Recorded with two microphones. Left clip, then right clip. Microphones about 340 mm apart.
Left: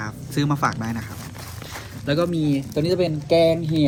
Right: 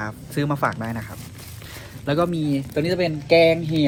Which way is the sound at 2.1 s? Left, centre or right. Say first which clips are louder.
Even; centre.